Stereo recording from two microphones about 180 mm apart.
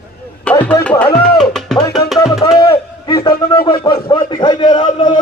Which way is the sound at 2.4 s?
30° left (ahead or behind).